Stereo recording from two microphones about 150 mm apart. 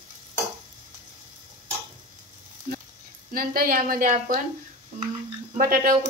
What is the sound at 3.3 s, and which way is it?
A woman's voice, 75° right (ahead or behind).